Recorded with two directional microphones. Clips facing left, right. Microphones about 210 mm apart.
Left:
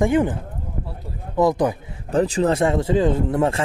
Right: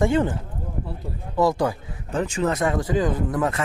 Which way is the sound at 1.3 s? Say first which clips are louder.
Left 3 dB; 20° left (ahead or behind).